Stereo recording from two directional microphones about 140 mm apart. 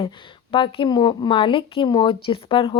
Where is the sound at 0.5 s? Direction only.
40° left (ahead or behind).